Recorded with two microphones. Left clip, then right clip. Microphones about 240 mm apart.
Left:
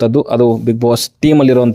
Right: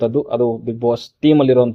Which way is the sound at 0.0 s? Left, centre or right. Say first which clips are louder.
Left 5 dB; left.